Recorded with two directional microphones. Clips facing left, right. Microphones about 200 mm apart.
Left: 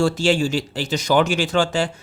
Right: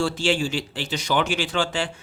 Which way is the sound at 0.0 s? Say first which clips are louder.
Left 5 dB; 40° left (ahead or behind).